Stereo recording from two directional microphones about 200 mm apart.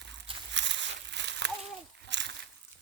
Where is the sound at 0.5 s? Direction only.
65° right (ahead or behind).